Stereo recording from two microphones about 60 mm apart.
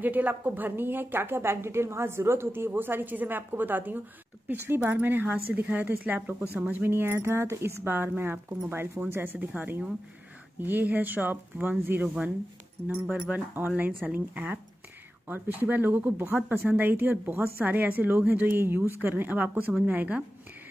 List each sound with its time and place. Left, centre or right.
0.0 s a woman's voice: right
6.8 s a woman's voice: right